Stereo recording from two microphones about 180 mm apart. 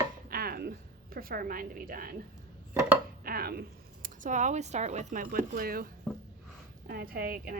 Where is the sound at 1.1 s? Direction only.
55° right (ahead or behind).